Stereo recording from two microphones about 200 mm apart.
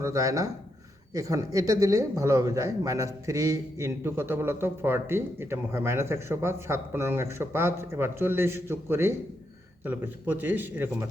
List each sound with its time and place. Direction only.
0.0 s a man's voice: 15° right (ahead or behind)